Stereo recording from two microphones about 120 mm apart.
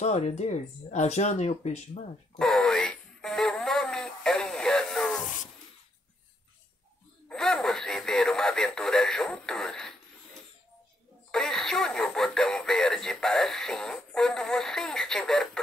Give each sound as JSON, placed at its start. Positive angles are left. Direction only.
{"t": 0.0, "sound": "speech", "side_deg": 70}
{"t": 2.3, "sound": "a sound", "side_deg": 5}
{"t": 7.2, "sound": "radio", "side_deg": 5}
{"t": 11.3, "sound": "radio", "side_deg": 5}